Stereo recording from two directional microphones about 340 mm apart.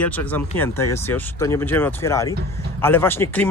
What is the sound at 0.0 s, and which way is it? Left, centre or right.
Speech, centre.